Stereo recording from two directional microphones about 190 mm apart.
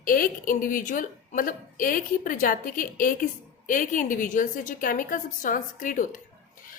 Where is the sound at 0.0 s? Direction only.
45° left (ahead or behind).